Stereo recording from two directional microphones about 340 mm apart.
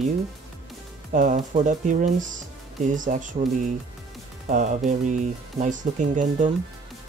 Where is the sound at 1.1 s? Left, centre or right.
Right.